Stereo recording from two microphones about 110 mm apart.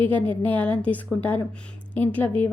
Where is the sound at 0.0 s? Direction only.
15° left (ahead or behind).